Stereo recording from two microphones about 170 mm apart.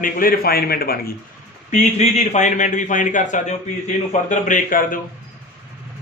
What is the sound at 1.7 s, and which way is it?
A man's voice, 40° left (ahead or behind).